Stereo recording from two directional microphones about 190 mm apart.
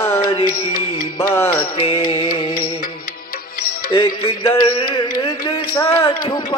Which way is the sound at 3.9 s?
20° left (ahead or behind).